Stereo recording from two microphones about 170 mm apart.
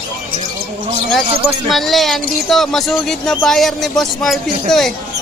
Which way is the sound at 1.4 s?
Centre (ahead or behind).